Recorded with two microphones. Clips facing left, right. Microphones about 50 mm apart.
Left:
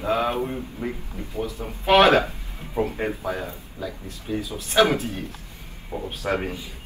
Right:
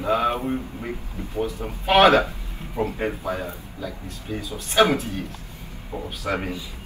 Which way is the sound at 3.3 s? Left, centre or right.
Right.